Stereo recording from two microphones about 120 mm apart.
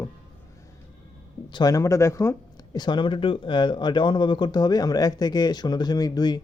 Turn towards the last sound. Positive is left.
turn(degrees=35)  # may be behind; listen again after turning